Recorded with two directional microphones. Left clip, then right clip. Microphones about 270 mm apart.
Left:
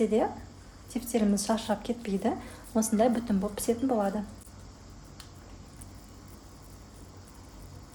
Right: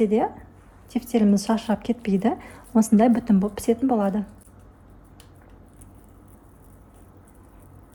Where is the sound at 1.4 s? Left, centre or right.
Right.